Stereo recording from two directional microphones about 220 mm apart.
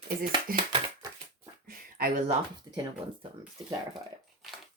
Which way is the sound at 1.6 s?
40° right (ahead or behind).